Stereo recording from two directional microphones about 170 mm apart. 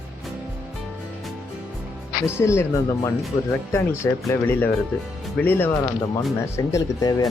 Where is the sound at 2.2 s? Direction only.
15° left (ahead or behind).